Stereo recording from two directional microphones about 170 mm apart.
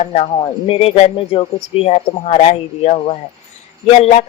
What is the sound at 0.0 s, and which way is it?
Speech, 40° left (ahead or behind).